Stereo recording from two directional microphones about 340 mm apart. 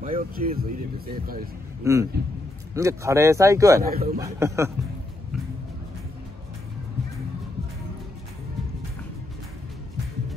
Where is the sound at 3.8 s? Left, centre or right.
Right.